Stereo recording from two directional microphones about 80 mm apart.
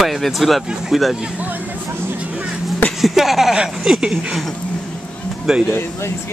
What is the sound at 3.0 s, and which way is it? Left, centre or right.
Speech, centre.